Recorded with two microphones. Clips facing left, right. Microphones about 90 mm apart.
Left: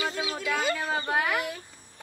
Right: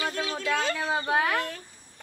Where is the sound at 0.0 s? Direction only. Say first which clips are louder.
Right 1 dB; 10° left (ahead or behind).